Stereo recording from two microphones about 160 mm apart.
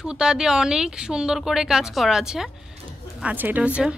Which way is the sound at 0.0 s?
5° right (ahead or behind).